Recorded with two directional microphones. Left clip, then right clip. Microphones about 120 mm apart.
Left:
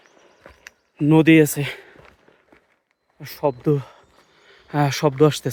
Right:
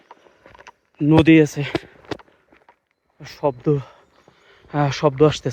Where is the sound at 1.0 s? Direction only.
45° left (ahead or behind).